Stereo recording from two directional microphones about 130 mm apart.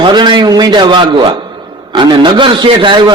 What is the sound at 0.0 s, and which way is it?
A man's voice, 35° right (ahead or behind).